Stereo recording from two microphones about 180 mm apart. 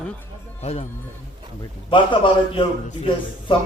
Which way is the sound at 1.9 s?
30° left (ahead or behind).